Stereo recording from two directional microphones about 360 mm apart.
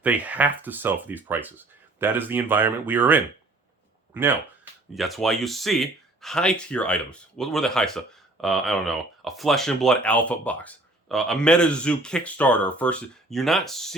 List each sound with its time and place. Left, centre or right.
0.0 s speech: centre